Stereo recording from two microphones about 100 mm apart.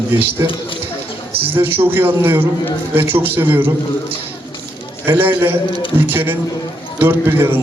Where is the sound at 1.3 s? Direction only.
20° right (ahead or behind).